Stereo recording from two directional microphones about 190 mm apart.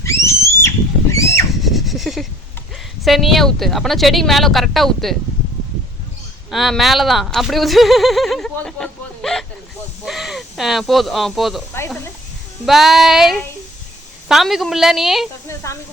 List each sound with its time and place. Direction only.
0.0 s a sound: 15° left (ahead or behind)
1.6 s a sound: centre (ahead or behind)
3.0 s speech: centre (ahead or behind)
6.5 s speech: centre (ahead or behind)
12.6 s speech: centre (ahead or behind)
15.4 s speech: 15° left (ahead or behind)